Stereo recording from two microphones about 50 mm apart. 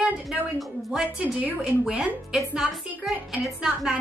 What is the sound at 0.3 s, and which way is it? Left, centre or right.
Speech, centre.